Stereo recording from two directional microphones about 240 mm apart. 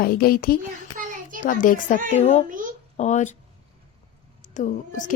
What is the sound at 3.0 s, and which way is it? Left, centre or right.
Speech, left.